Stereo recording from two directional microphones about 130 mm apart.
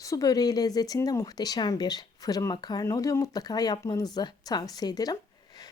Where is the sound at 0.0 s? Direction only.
25° left (ahead or behind).